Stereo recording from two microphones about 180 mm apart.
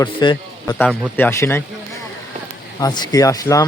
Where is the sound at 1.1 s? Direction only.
15° left (ahead or behind).